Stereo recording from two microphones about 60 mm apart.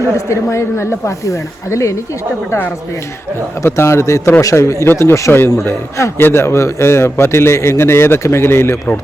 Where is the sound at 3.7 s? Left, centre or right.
Left.